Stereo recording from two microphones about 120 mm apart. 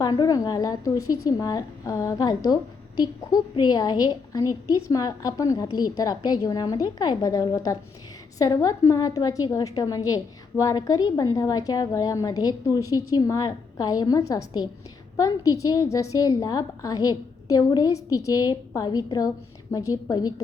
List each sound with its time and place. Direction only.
0.0 s a woman's voice: 35° left (ahead or behind)